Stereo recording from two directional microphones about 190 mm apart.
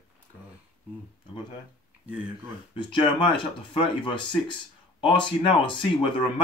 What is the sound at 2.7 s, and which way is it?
Speech, 25° left (ahead or behind).